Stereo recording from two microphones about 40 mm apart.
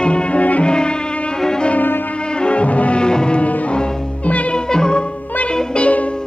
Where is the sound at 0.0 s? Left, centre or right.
Left.